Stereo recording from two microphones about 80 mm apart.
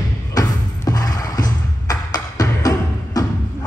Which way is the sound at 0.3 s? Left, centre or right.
Left.